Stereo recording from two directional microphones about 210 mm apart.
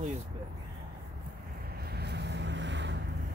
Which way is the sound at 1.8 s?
50° right (ahead or behind).